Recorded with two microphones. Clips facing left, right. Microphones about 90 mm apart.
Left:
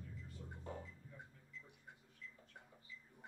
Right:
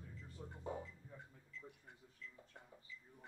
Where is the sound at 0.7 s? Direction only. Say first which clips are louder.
Right 4 dB; 15° right (ahead or behind).